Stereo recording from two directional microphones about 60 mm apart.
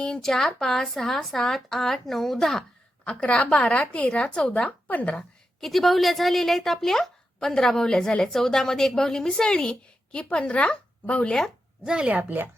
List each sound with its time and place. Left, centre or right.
0.0 s speech: centre
3.0 s a woman's voice: centre
5.5 s a woman's voice: centre; by 11.3 s left
12.0 s speech: right